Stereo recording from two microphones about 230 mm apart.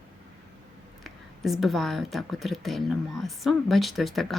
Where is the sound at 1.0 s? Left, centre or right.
Centre.